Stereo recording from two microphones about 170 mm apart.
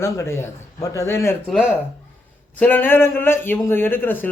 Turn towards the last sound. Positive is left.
turn(degrees=10)  # may be behind; listen again after turning